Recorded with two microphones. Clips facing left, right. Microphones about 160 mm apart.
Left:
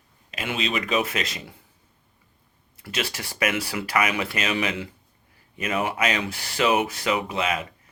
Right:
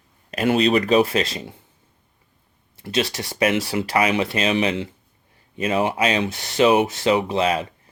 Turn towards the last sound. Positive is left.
turn(degrees=-30)  # may be behind; listen again after turning